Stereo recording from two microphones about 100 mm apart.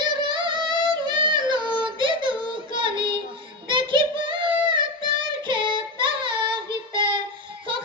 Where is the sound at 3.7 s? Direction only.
55° right (ahead or behind).